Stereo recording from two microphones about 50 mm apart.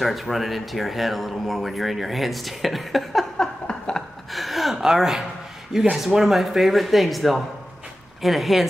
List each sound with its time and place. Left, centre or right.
0.0 s speech: centre
3.6 s a sound: centre
4.3 s gasp: centre
4.7 s speech: centre